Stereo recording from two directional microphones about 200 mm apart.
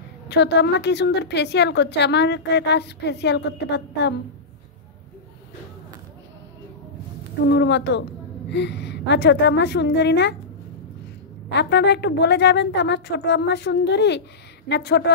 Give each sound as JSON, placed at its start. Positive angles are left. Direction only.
{"t": 0.3, "sound": "a woman's voice", "side_deg": 60}
{"t": 7.4, "sound": "a woman's voice", "side_deg": 60}
{"t": 11.4, "sound": "a woman's voice", "side_deg": 60}